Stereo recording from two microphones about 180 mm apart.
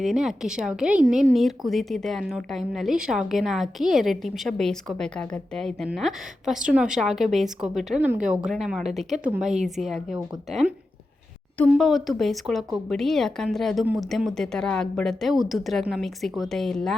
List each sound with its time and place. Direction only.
0.0 s a woman's voice: centre (ahead or behind)